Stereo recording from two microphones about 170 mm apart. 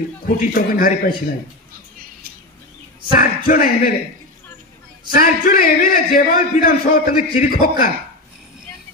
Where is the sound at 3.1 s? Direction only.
55° left (ahead or behind).